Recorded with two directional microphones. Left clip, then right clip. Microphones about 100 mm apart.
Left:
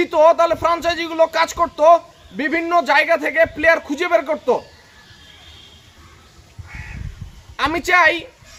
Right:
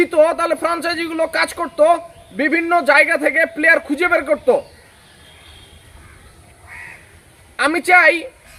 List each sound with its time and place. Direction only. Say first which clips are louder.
0.0 s a man's voice: left 1 dB; 35° left (ahead or behind)
7.5 s a man's voice: right 3 dB; 35° left (ahead or behind)